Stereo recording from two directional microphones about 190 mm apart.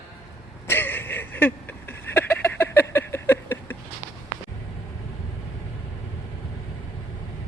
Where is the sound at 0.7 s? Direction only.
10° left (ahead or behind).